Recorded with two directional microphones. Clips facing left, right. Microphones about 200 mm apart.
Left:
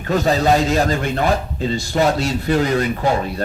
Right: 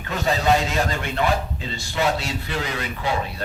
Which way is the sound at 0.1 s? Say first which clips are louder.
Left 5 dB; 40° left (ahead or behind).